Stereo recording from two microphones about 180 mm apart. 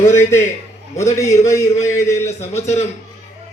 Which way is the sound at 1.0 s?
40° left (ahead or behind).